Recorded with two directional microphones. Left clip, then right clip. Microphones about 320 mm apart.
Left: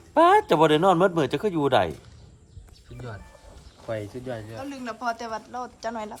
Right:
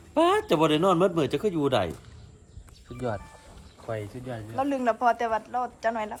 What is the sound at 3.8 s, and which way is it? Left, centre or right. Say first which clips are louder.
Speech: left 3 dB; left.